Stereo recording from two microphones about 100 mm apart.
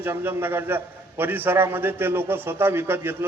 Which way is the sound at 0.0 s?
25° right (ahead or behind).